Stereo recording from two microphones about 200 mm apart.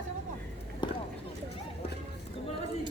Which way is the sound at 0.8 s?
25° left (ahead or behind).